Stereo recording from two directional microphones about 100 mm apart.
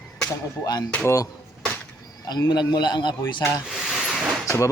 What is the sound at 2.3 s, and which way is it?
Speech, 45° left (ahead or behind).